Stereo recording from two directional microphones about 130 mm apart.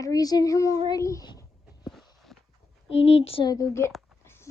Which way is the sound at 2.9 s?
50° left (ahead or behind).